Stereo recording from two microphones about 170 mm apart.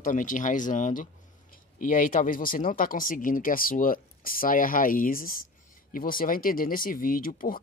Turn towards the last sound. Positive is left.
turn(degrees=55)  # may be behind; listen again after turning